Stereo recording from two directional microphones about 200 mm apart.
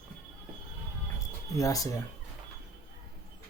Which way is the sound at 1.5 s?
15° left (ahead or behind).